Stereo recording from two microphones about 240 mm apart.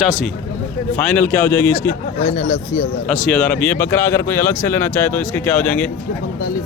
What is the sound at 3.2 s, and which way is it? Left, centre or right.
Speech, centre.